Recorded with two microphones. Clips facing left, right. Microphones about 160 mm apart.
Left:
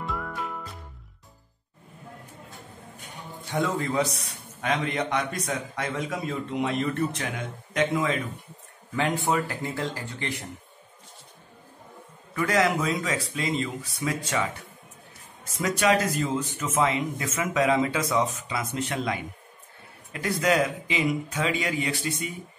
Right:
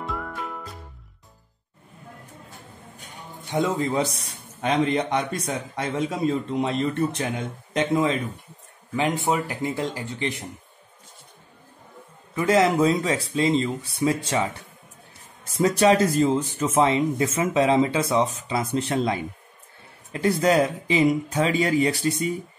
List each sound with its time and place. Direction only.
0.0 s music: centre (ahead or behind)
3.4 s speech: 20° right (ahead or behind)
8.9 s speech: 20° right (ahead or behind)
12.4 s speech: 25° right (ahead or behind)
15.5 s speech: 30° right (ahead or behind)